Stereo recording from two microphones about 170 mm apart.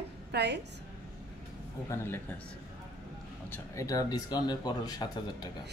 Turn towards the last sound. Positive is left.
turn(degrees=25)  # may be behind; listen again after turning